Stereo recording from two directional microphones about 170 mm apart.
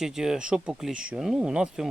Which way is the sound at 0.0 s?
Centre (ahead or behind).